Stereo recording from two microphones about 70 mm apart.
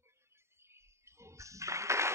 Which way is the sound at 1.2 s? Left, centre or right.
Right.